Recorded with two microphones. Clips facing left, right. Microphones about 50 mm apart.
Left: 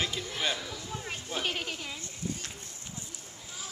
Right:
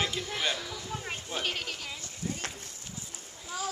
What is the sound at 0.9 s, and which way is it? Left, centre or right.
Speech, centre.